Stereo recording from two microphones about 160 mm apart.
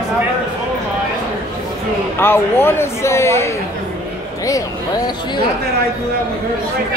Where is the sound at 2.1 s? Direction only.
15° left (ahead or behind).